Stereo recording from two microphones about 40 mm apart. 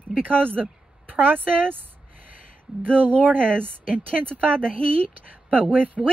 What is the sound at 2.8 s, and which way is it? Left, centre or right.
Speech, right.